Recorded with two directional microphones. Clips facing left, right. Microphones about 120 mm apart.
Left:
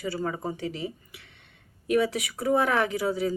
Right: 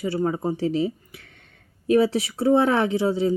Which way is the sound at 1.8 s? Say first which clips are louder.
Right 5 dB; 30° right (ahead or behind).